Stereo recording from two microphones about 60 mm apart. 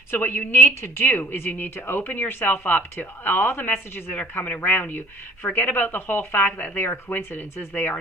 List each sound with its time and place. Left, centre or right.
0.1 s speech: left